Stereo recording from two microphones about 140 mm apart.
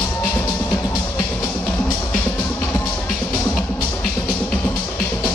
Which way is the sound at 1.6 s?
10° left (ahead or behind).